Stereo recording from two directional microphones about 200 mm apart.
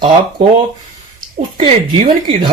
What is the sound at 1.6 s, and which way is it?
Speech, 30° right (ahead or behind).